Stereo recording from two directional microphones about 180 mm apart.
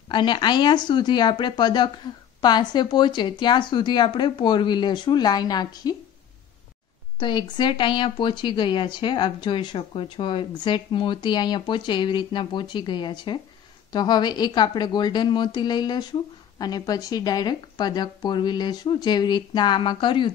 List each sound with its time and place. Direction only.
0.1 s speech: 25° left (ahead or behind)
7.2 s speech: 25° left (ahead or behind)